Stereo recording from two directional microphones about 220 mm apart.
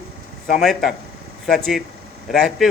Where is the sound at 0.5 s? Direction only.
Centre (ahead or behind).